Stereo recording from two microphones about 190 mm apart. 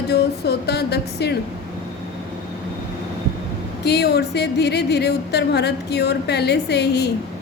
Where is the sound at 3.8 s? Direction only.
60° left (ahead or behind).